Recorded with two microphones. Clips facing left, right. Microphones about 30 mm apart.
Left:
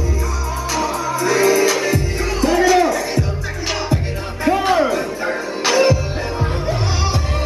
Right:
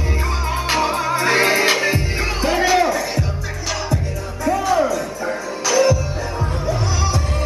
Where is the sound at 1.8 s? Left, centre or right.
Right.